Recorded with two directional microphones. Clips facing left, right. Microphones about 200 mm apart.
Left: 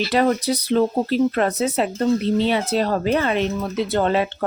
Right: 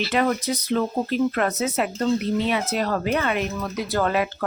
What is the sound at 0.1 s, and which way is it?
Speech, 35° left (ahead or behind).